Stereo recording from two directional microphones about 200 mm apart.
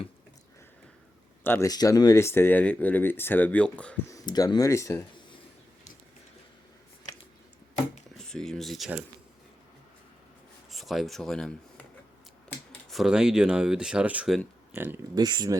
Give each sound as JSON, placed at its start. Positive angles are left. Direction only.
{"t": 1.5, "sound": "speech", "side_deg": 15}
{"t": 4.1, "sound": "speech", "side_deg": 20}
{"t": 8.1, "sound": "speech", "side_deg": 5}
{"t": 10.7, "sound": "speech", "side_deg": 0}
{"t": 12.9, "sound": "speech", "side_deg": 0}